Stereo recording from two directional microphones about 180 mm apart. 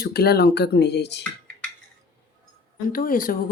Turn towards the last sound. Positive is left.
turn(degrees=50)  # may be behind; listen again after turning